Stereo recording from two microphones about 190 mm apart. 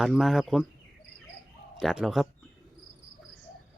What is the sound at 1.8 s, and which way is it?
Speech, centre (ahead or behind).